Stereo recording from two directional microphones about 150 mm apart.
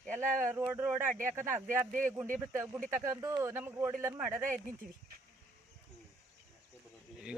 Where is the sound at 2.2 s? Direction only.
60° right (ahead or behind).